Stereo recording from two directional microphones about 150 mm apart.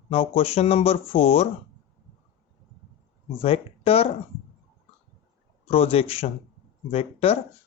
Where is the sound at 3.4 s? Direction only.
40° left (ahead or behind).